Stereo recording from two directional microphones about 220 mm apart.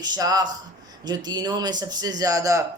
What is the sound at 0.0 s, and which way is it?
Speech, 20° right (ahead or behind).